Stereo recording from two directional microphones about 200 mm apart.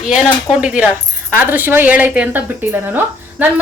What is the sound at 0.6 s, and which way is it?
Speech, 5° right (ahead or behind).